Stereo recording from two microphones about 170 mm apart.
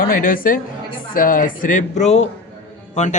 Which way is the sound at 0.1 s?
55° left (ahead or behind).